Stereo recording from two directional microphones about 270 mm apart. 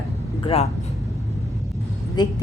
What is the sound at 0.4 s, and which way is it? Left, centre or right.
Speech, left.